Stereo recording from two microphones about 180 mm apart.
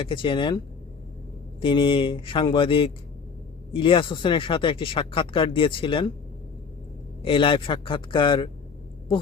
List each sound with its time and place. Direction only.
0.0 s speech: 30° left (ahead or behind)
1.6 s speech: 30° left (ahead or behind)
7.2 s speech: 30° left (ahead or behind)